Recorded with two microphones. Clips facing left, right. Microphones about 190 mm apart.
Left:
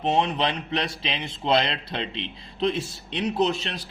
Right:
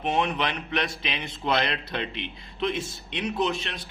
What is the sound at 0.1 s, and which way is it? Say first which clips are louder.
A man's voice: left 2 dB; 30° left (ahead or behind).